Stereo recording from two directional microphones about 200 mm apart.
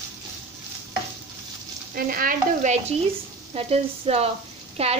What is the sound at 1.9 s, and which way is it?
Stir, 45° right (ahead or behind).